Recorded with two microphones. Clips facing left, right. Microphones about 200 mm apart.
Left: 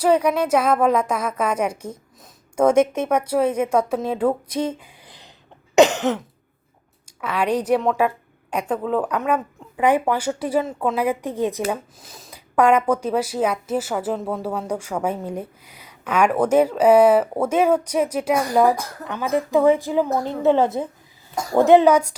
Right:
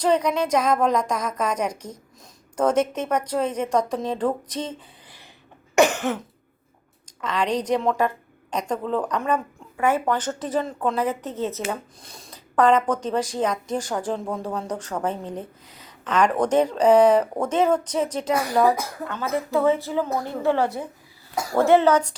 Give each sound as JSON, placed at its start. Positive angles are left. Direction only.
{"t": 0.0, "sound": "speech", "side_deg": 10}
{"t": 5.7, "sound": "throat clearing", "side_deg": 20}
{"t": 7.0, "sound": "a woman's voice", "side_deg": 10}